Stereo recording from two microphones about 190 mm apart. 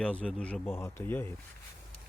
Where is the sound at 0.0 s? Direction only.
5° left (ahead or behind).